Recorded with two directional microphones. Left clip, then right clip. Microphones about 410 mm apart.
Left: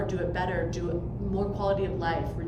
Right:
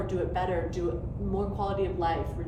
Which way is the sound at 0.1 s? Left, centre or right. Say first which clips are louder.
Even; centre.